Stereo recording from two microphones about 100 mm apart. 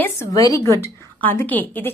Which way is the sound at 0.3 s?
35° left (ahead or behind).